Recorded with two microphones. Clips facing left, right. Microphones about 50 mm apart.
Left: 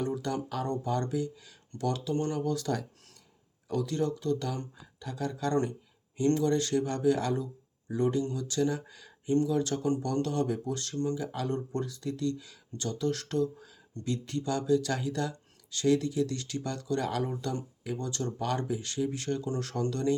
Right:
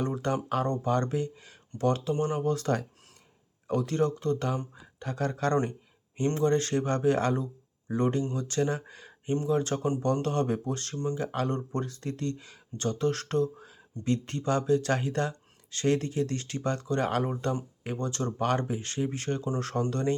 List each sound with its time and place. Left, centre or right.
0.0 s a sound: right
0.4 s speech: right
6.1 s speech: right